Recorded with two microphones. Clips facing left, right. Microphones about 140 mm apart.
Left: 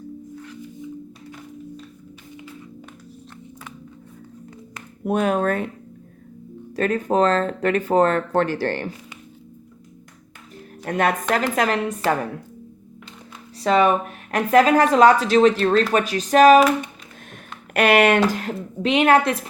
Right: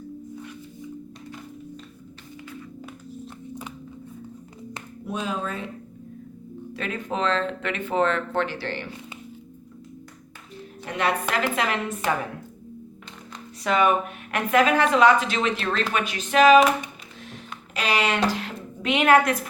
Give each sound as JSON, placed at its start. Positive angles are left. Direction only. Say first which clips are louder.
{"t": 5.0, "sound": "speech", "louder": "left 10 dB", "side_deg": 60}
{"t": 6.7, "sound": "speech", "louder": "left 10 dB", "side_deg": 45}
{"t": 10.8, "sound": "speech", "louder": "left 4 dB", "side_deg": 45}
{"t": 13.6, "sound": "speech", "louder": "left 4 dB", "side_deg": 30}
{"t": 17.7, "sound": "speech", "louder": "left 8 dB", "side_deg": 60}
{"t": 18.8, "sound": "speech", "louder": "left 2 dB", "side_deg": 30}